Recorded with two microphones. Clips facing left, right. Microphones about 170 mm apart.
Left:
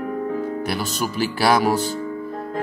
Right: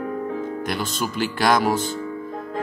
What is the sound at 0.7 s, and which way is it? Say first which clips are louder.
Speech: left 1 dB; 10° left (ahead or behind).